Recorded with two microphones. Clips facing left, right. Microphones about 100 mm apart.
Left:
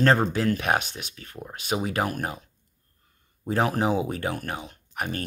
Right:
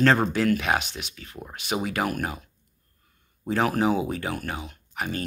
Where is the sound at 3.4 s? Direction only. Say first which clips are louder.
Right 1 dB; 35° left (ahead or behind).